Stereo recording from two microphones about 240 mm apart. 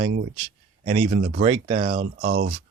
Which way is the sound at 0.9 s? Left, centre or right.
Right.